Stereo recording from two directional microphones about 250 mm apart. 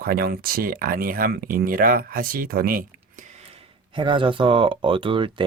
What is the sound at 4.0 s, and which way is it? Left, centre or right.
Speech, centre.